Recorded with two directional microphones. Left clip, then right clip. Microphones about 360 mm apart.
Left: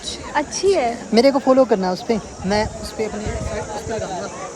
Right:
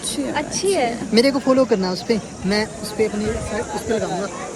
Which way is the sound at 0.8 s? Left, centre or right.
Centre.